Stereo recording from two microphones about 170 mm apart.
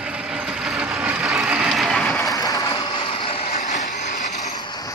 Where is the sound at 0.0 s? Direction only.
5° right (ahead or behind).